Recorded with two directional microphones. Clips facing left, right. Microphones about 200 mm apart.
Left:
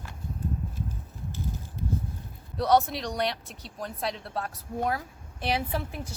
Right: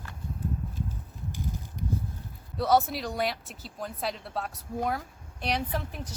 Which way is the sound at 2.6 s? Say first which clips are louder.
Left 1 dB; 5° right (ahead or behind).